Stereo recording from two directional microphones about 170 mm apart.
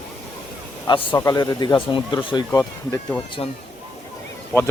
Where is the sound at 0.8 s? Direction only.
25° left (ahead or behind).